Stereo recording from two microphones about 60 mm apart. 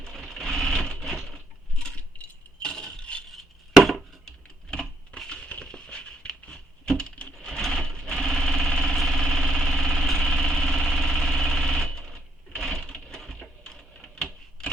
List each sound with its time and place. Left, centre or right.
0.0 s sewing machine: centre
1.8 s coin: centre
3.2 s glass: centre
4.7 s a sound: centre
7.4 s sewing machine: centre
14.6 s a sound: centre